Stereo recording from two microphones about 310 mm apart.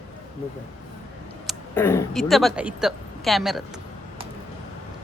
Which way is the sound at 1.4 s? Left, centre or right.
Centre.